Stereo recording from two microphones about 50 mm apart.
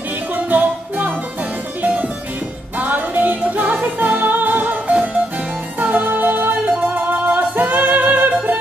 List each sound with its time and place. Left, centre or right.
0.5 s music: right
4.8 s music: right
5.8 s music: right